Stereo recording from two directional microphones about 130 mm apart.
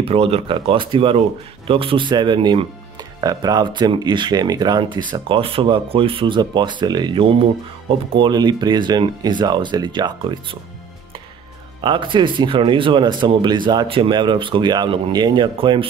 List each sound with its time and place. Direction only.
0.0 s speech: 50° right (ahead or behind)
11.8 s speech: 40° right (ahead or behind)